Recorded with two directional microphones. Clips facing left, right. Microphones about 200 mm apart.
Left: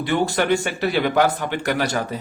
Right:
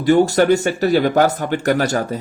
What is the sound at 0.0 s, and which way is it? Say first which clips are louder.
Speech: right 7 dB; 40° right (ahead or behind).